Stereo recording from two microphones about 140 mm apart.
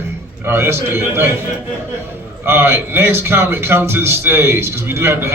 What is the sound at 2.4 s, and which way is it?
A man's voice, 15° right (ahead or behind).